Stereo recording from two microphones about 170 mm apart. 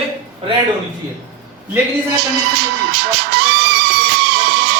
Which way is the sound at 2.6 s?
80° right.